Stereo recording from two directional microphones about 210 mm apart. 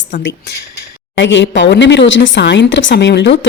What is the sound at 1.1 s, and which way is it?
A woman's voice, 60° left (ahead or behind).